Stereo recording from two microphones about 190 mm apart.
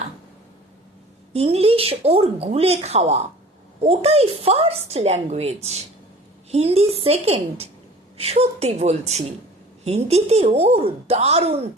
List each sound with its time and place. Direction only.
1.3 s a woman's voice: 35° right (ahead or behind)